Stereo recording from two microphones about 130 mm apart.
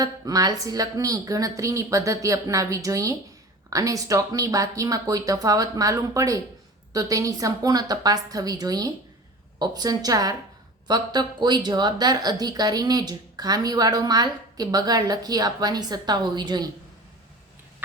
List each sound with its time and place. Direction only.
0.0 s speech: 30° right (ahead or behind)